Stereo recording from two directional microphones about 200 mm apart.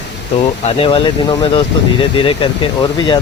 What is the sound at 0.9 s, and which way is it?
Speech, 25° left (ahead or behind).